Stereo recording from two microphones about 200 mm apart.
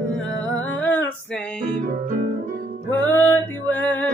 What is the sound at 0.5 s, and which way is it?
Music, 10° left (ahead or behind).